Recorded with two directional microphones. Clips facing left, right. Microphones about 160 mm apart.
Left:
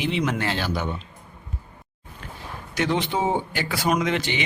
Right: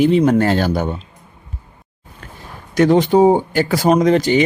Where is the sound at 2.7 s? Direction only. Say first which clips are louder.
Right 12 dB; 40° right (ahead or behind).